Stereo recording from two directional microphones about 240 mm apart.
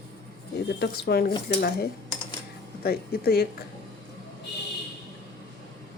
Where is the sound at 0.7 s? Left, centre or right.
Left.